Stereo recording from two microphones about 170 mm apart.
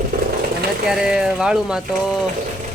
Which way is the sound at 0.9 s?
5° right (ahead or behind).